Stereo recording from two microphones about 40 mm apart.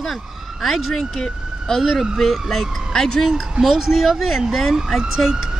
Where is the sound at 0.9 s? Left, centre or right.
Centre.